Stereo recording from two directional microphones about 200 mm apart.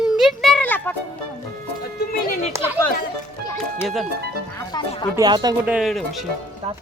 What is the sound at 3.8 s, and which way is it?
Speech, centre (ahead or behind).